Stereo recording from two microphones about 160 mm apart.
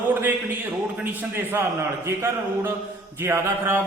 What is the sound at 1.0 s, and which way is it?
A man's voice, 10° right (ahead or behind).